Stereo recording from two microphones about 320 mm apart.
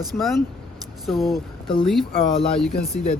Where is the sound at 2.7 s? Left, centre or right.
Left.